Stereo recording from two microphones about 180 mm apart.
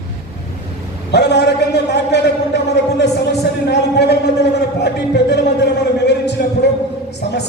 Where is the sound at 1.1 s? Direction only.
70° left (ahead or behind).